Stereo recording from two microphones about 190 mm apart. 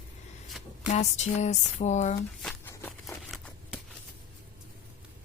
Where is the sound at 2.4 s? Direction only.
10° left (ahead or behind).